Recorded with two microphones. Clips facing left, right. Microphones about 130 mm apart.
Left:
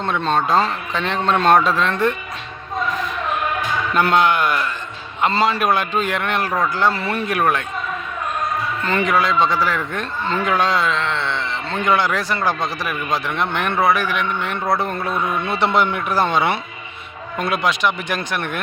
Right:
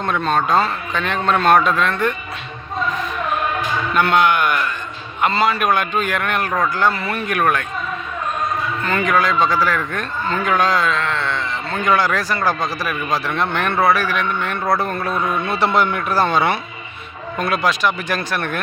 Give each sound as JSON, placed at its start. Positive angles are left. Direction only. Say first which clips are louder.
{"t": 0.0, "sound": "speech", "louder": "right 1 dB", "side_deg": 25}
{"t": 3.9, "sound": "speech", "louder": "even", "side_deg": 30}
{"t": 8.8, "sound": "speech", "louder": "even", "side_deg": 30}